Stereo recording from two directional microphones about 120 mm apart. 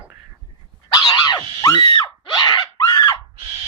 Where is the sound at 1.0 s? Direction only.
35° left (ahead or behind).